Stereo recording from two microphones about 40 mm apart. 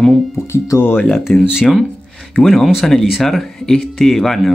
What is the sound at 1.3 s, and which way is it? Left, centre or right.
Speech, centre.